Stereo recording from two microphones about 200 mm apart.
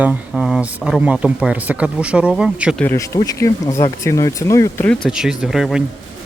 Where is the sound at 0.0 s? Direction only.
5° right (ahead or behind).